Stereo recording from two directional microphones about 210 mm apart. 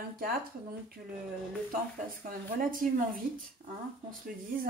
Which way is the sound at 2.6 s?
40° right (ahead or behind).